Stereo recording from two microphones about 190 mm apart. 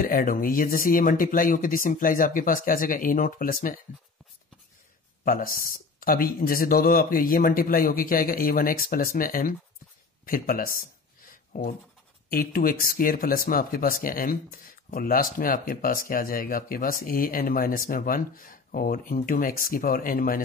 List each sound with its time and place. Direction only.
0.0 s speech: 50° left (ahead or behind)
5.2 s speech: 50° left (ahead or behind)